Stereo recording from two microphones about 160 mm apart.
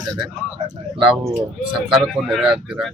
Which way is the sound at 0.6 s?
30° right (ahead or behind).